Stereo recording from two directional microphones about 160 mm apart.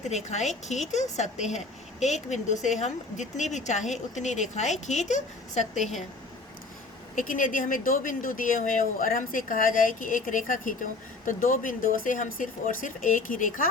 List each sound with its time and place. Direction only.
0.0 s speech: 45° left (ahead or behind)
5.7 s a woman's voice: centre (ahead or behind)
7.2 s speech: 60° left (ahead or behind)